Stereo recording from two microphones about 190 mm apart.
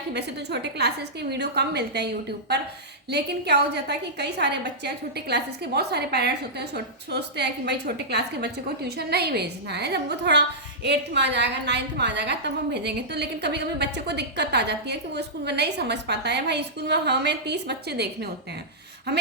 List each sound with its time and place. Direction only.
0.1 s a woman's voice: 60° right (ahead or behind)
3.1 s a woman's voice: 60° right (ahead or behind)